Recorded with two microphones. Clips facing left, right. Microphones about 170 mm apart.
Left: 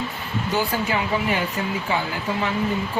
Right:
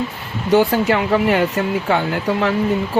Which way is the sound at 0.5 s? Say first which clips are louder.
Right 10 dB; 65° right (ahead or behind).